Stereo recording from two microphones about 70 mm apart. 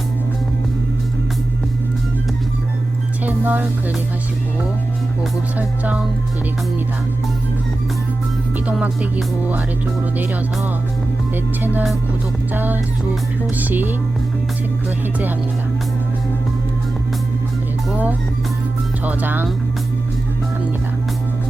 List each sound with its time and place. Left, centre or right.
3.2 s speech: right
5.5 s speech: right
11.3 s speech: right
17.9 s speech: right